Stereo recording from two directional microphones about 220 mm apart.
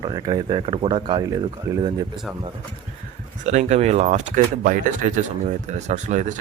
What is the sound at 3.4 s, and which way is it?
Speech, 30° right (ahead or behind).